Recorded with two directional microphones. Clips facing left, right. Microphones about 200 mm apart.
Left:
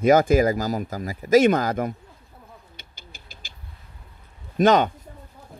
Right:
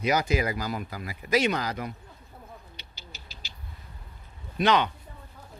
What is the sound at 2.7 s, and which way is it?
Owl, 50° left (ahead or behind).